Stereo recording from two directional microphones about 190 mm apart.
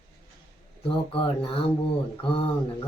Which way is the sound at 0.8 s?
30° left (ahead or behind).